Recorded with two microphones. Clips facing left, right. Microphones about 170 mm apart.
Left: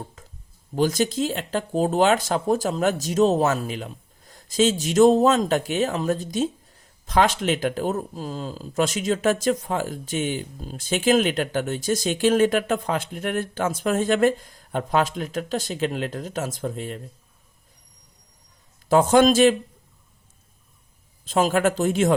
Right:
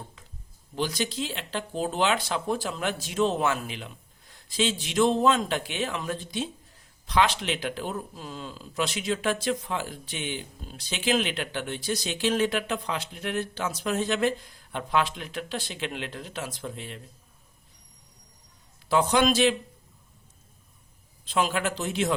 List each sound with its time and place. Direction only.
0.2 s a sound: 45° left (ahead or behind)
0.8 s speech: 45° left (ahead or behind)
18.9 s speech: 45° left (ahead or behind)
21.2 s speech: 45° left (ahead or behind)